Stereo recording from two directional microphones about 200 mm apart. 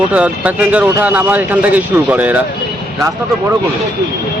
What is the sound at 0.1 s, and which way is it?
Speech, 5° right (ahead or behind).